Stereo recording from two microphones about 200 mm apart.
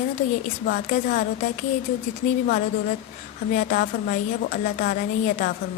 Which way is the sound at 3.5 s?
40° left (ahead or behind).